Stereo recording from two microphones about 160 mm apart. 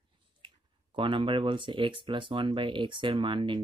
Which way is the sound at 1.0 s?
30° right (ahead or behind).